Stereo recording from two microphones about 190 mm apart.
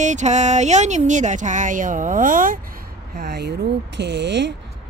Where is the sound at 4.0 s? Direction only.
70° right (ahead or behind).